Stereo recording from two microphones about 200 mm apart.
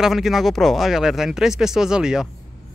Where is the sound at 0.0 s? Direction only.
Centre (ahead or behind).